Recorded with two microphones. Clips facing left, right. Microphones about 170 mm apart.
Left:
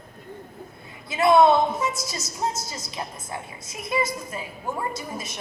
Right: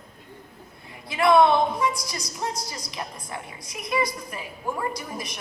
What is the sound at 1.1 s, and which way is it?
A woman's voice, 25° left (ahead or behind).